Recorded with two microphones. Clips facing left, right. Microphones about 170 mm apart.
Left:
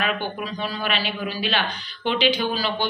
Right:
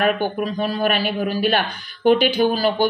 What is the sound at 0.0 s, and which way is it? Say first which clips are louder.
A man's voice: right 7 dB; 50° right (ahead or behind).